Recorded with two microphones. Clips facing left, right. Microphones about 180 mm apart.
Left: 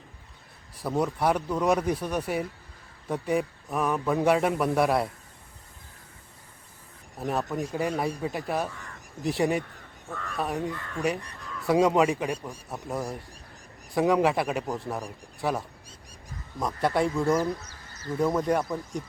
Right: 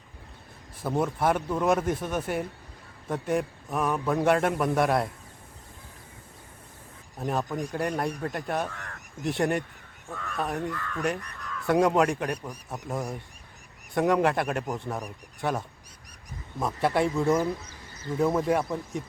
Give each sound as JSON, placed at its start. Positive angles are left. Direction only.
{"t": 0.8, "sound": "a man's voice", "side_deg": 0}
{"t": 7.2, "sound": "a man's voice", "side_deg": 0}
{"t": 8.7, "sound": "speech", "side_deg": -70}
{"t": 9.2, "sound": "a man's voice", "side_deg": 0}
{"t": 10.7, "sound": "speech", "side_deg": 20}
{"t": 11.6, "sound": "a man's voice", "side_deg": 0}